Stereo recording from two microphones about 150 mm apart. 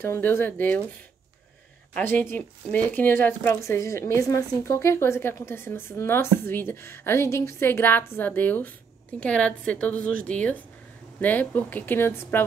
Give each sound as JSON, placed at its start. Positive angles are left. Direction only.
{"t": 0.0, "sound": "speech", "side_deg": 15}
{"t": 2.0, "sound": "speech", "side_deg": 10}